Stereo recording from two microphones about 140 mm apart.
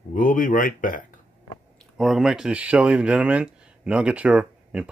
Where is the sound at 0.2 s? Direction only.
70° left (ahead or behind).